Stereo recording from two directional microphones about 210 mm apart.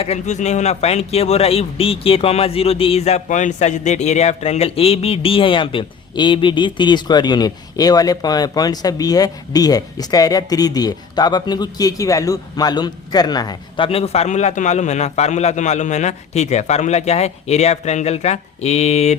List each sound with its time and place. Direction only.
0.0 s speech: 30° left (ahead or behind)